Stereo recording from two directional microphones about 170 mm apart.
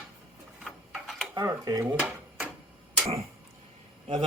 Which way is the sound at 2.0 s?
5° right (ahead or behind).